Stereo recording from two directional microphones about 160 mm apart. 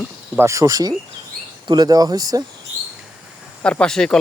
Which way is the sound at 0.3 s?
20° right (ahead or behind).